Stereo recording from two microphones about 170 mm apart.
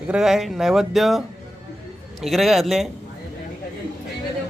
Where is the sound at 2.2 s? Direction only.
Centre (ahead or behind).